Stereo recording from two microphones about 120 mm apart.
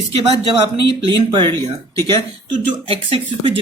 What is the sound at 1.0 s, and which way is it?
Speech, 40° right (ahead or behind).